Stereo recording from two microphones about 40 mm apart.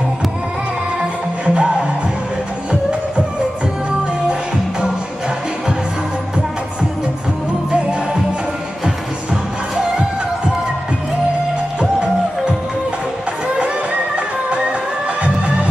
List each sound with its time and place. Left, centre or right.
1.4 s music: right
7.7 s music: right
11.8 s music: right
15.2 s music: right